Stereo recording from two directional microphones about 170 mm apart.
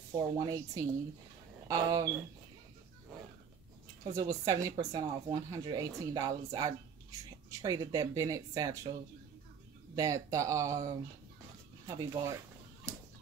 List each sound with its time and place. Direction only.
0.2 s speech: 20° right (ahead or behind)
4.0 s speech: 20° right (ahead or behind)
9.9 s speech: 20° right (ahead or behind)